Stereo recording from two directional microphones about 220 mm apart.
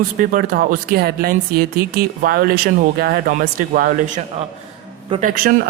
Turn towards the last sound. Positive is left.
turn(degrees=-40)  # may be behind; listen again after turning